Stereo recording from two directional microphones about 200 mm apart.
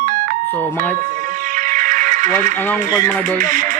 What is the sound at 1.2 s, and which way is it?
Music, 40° right (ahead or behind).